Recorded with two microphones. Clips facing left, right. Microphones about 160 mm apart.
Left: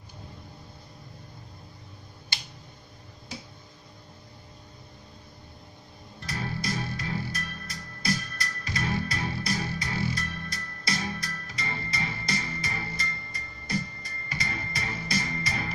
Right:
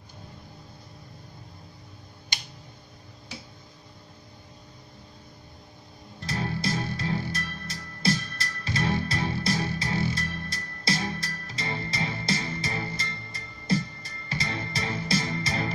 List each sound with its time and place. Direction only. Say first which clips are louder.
6.2 s music: right 3 dB; 30° right (ahead or behind)